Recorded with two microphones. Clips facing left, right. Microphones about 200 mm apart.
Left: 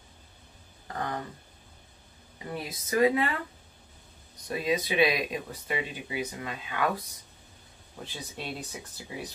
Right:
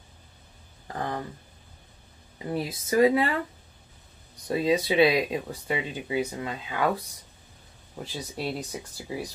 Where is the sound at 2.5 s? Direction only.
25° right (ahead or behind).